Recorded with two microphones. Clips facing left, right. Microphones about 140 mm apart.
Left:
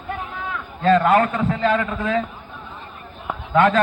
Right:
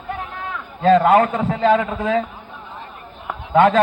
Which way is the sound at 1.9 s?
30° right (ahead or behind).